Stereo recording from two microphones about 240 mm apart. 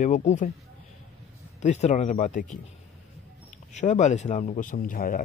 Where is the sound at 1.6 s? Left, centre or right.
Left.